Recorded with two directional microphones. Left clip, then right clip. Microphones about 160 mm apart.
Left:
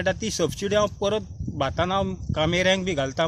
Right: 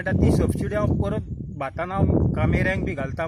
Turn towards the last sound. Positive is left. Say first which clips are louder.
# left 4 dB
turn(degrees=30)  # may be behind; listen again after turning